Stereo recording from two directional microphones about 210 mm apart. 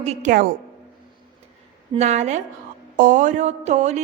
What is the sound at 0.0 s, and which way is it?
Speech, 30° right (ahead or behind).